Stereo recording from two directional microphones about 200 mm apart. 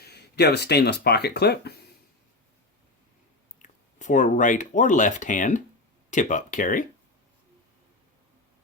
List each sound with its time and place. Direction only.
0.0 s speech: 55° left (ahead or behind)
3.6 s speech: 40° left (ahead or behind)